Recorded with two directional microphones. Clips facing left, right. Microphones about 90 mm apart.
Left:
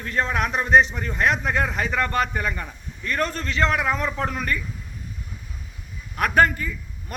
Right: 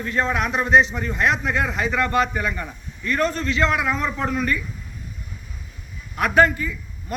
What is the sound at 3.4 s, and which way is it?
A man's voice, 45° left (ahead or behind).